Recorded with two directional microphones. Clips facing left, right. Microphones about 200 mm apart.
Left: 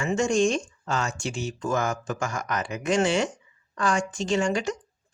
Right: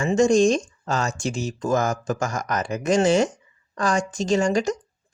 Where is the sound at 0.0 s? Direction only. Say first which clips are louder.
Right 5 dB; 35° right (ahead or behind).